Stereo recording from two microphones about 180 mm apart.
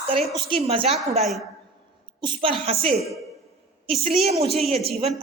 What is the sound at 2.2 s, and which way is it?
Speech, 30° right (ahead or behind).